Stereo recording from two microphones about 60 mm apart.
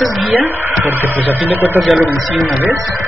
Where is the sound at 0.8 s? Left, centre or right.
Right.